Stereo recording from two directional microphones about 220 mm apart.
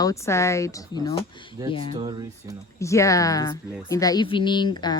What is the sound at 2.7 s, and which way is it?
Speech, 15° left (ahead or behind).